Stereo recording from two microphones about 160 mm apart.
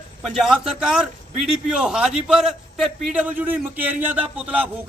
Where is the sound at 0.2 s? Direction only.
Centre (ahead or behind).